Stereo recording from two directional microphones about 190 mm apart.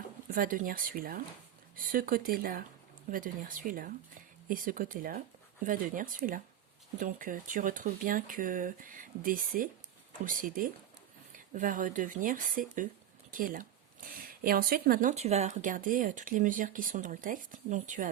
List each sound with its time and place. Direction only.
0.3 s speech: 50° right (ahead or behind)
15.1 s speech: 35° right (ahead or behind)